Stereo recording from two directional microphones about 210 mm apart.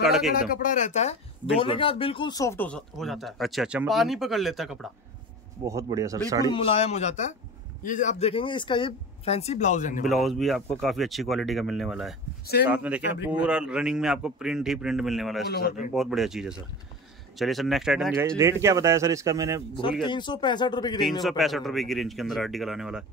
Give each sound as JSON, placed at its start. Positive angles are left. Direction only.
{"t": 0.0, "sound": "speech", "side_deg": 0}
{"t": 0.5, "sound": "speech", "side_deg": 40}
{"t": 5.7, "sound": "speech", "side_deg": -15}
{"t": 6.5, "sound": "speech", "side_deg": 30}
{"t": 10.0, "sound": "speech", "side_deg": 0}
{"t": 15.4, "sound": "a man's voice", "side_deg": 45}
{"t": 15.9, "sound": "speech", "side_deg": 0}
{"t": 18.2, "sound": "speech", "side_deg": -15}
{"t": 20.1, "sound": "speech", "side_deg": 20}
{"t": 21.2, "sound": "speech", "side_deg": 0}